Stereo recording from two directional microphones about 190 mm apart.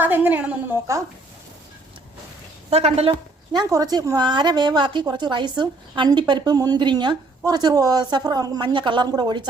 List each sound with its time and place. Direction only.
0.0 s a woman's voice: 10° right (ahead or behind)
2.6 s a woman's voice: 30° right (ahead or behind)